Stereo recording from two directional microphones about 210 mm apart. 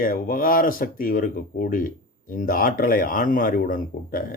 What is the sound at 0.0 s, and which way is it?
Speech, 40° left (ahead or behind).